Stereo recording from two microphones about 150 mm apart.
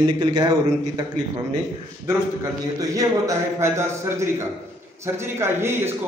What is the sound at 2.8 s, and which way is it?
A man's voice, 20° right (ahead or behind).